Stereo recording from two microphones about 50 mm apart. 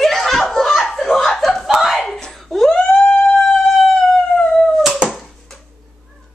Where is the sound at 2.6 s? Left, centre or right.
Centre.